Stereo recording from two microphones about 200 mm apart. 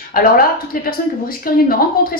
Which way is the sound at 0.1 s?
45° left (ahead or behind).